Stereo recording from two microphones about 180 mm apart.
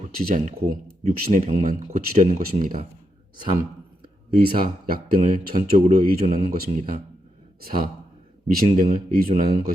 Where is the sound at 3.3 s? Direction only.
25° right (ahead or behind).